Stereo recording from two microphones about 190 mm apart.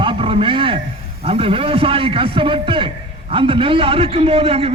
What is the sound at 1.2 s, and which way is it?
A man's voice, 30° right (ahead or behind).